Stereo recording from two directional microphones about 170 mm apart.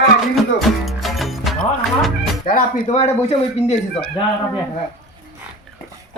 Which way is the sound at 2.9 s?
40° left (ahead or behind).